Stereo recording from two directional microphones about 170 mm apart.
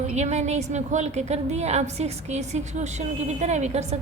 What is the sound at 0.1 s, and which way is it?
A woman's voice, 40° right (ahead or behind).